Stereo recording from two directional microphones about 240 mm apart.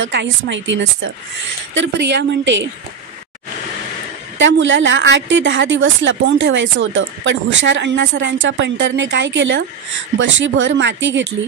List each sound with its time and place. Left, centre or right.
0.0 s a woman's voice: right
4.4 s a woman's voice: right